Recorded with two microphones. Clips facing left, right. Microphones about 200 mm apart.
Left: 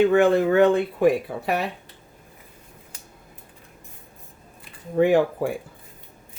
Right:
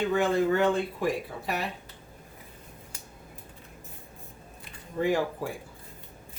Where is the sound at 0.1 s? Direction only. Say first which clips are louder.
Left 7 dB; 65° left (ahead or behind).